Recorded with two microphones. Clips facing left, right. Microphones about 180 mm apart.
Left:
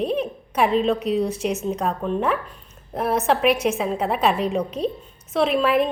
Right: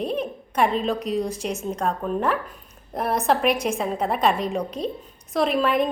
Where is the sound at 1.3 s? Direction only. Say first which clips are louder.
Left 4 dB; 35° right (ahead or behind).